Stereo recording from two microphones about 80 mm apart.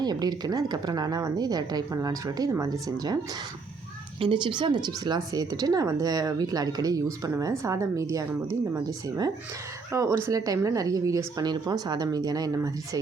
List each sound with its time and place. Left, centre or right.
0.0 s speech: right
4.2 s speech: right
9.9 s speech: right
11.7 s speech: right